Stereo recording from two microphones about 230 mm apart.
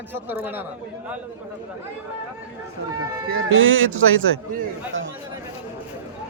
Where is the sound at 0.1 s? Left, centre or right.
Centre.